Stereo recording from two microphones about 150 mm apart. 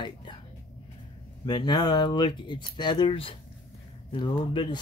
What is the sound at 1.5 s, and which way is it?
Speech, 30° left (ahead or behind).